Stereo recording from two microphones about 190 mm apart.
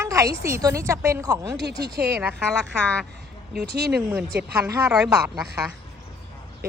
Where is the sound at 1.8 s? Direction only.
55° right (ahead or behind).